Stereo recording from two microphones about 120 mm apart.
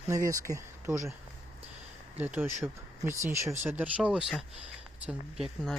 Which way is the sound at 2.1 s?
15° right (ahead or behind).